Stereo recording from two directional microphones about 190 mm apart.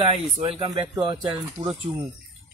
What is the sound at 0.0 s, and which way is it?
Speech, 30° right (ahead or behind).